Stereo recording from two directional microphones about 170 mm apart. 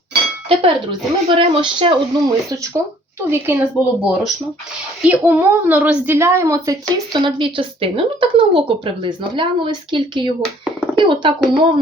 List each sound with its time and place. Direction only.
0.4 s a woman's voice: 30° right (ahead or behind)
3.2 s a woman's voice: 10° right (ahead or behind); by 11.6 s 30° right (ahead or behind)